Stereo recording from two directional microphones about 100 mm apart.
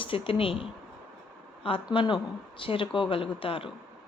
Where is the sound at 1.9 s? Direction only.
55° left (ahead or behind).